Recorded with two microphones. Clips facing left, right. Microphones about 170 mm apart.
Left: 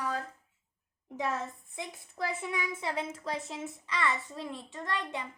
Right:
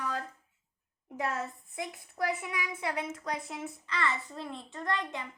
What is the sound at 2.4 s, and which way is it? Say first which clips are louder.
A woman's voice: left 1 dB; 25° left (ahead or behind).